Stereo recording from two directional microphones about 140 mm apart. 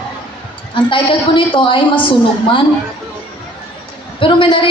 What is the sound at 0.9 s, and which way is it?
Speech, 35° left (ahead or behind).